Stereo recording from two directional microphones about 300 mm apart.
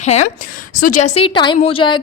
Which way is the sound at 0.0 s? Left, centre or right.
Left.